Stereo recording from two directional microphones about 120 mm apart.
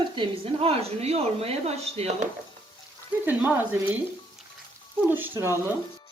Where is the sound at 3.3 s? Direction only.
15° right (ahead or behind).